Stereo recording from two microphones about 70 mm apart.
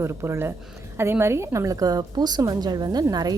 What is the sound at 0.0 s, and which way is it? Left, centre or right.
A woman's voice, right.